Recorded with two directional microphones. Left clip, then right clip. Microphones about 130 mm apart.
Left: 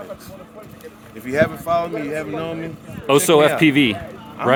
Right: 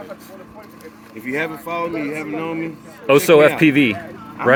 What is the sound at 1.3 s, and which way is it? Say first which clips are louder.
Speech: left 5 dB; 35° left (ahead or behind).